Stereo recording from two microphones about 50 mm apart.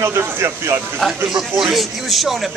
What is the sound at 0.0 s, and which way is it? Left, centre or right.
Speech, right.